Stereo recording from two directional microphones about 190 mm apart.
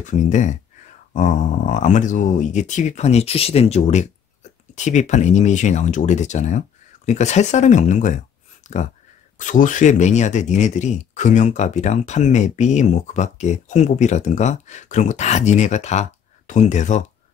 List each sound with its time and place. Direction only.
0.0 s speech: 40° left (ahead or behind)